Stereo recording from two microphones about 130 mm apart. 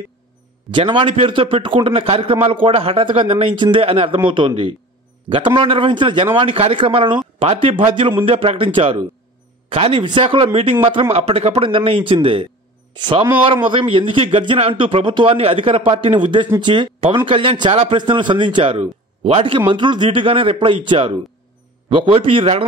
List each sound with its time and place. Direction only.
0.7 s a man's voice: 40° right (ahead or behind)